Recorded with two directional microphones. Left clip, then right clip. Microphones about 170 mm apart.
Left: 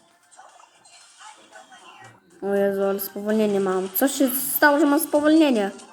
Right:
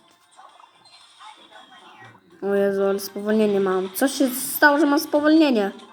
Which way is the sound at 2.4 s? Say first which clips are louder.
Right 1 dB; centre (ahead or behind).